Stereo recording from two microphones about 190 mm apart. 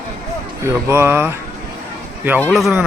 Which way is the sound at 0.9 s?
10° right (ahead or behind).